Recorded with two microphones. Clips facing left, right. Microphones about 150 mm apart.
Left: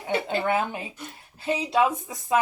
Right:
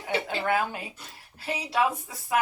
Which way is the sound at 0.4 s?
20° left (ahead or behind).